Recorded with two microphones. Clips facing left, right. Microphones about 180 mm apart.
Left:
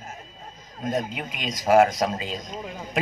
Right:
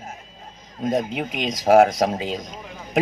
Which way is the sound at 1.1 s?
70° right (ahead or behind).